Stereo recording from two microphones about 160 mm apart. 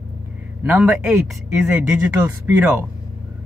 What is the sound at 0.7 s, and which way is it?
Speech, 10° right (ahead or behind).